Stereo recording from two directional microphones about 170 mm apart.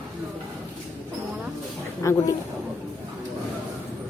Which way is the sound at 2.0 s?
20° left (ahead or behind).